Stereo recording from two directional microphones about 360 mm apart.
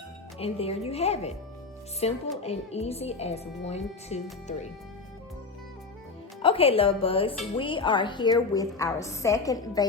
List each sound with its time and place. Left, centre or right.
0.3 s a child's voice: centre
6.4 s a child's voice: centre